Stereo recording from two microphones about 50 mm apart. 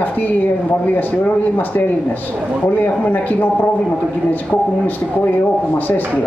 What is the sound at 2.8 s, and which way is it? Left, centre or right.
Speech, left.